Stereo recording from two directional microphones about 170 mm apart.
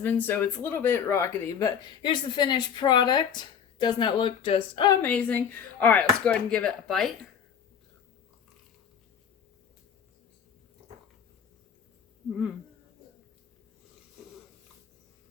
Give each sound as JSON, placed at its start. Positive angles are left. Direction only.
{"t": 0.0, "sound": "speech", "side_deg": 10}
{"t": 5.0, "sound": "speech", "side_deg": 10}
{"t": 12.3, "sound": "speech", "side_deg": -5}